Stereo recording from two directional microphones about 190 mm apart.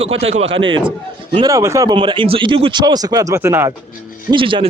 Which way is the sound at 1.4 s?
15° right (ahead or behind).